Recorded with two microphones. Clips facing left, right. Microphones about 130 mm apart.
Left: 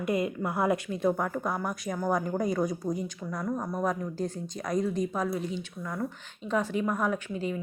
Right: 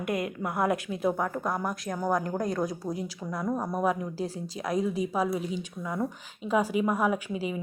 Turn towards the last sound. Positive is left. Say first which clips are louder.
# right 1 dB
turn(degrees=-10)  # may be behind; listen again after turning